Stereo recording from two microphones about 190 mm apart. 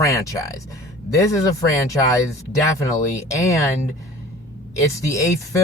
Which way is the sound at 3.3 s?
15° left (ahead or behind).